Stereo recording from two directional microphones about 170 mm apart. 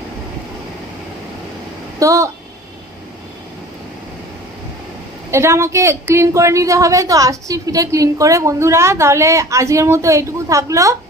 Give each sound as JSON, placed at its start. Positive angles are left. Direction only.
{"t": 2.0, "sound": "speech", "side_deg": -20}
{"t": 5.3, "sound": "a woman's voice", "side_deg": -15}